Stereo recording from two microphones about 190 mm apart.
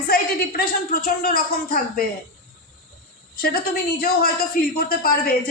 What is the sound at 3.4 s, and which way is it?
A woman's voice, 50° left (ahead or behind).